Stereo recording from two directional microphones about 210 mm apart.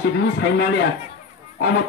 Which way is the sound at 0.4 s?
50° left (ahead or behind).